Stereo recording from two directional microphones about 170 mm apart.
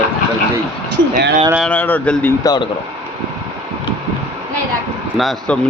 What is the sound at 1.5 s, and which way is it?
Speech, 5° left (ahead or behind).